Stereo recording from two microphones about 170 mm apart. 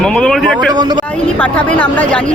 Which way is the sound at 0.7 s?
25° right (ahead or behind).